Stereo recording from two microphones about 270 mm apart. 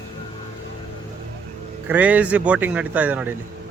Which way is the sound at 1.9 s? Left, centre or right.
Centre.